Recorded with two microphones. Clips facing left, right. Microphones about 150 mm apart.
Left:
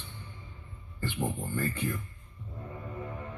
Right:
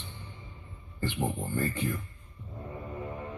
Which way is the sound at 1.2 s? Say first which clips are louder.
Right 1 dB; 15° right (ahead or behind).